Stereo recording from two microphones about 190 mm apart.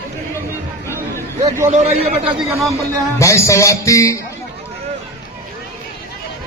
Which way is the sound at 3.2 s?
15° left (ahead or behind).